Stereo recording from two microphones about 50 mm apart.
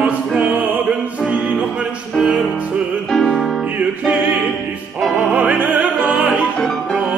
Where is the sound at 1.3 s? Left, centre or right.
Right.